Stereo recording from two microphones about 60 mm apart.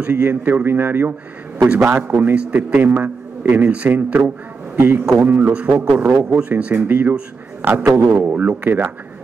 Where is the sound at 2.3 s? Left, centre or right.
Right.